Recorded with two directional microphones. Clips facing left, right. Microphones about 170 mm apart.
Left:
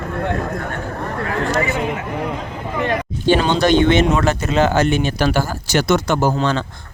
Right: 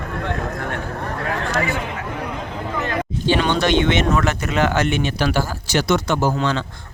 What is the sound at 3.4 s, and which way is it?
Speech, 35° left (ahead or behind).